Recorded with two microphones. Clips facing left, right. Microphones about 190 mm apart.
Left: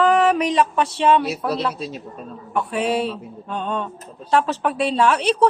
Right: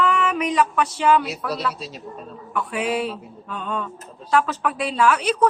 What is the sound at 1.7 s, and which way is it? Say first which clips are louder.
Speech: left 5 dB; 50° left (ahead or behind).